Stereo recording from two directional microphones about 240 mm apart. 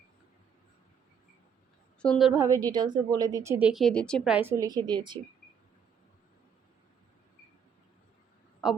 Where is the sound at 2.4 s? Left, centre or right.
Centre.